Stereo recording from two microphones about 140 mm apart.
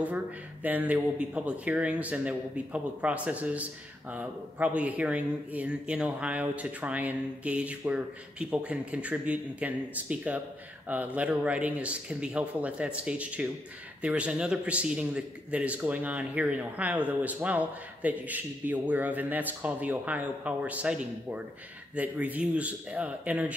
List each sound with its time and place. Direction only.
0.0 s a man's voice: 10° right (ahead or behind)